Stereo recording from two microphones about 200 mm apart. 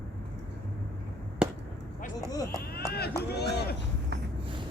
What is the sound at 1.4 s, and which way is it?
Chop, 5° right (ahead or behind).